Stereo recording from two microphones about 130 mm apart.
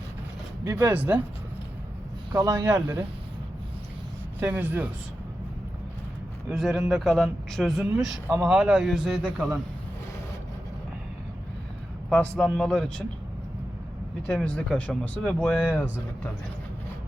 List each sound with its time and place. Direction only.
0.6 s speech: 30° right (ahead or behind)
0.9 s speech: 10° right (ahead or behind)
2.3 s speech: 30° right (ahead or behind)
2.8 s speech: 15° right (ahead or behind)
4.4 s speech: 15° right (ahead or behind)
6.5 s speech: centre (ahead or behind)
12.1 s speech: 5° left (ahead or behind)
14.2 s speech: 5° left (ahead or behind)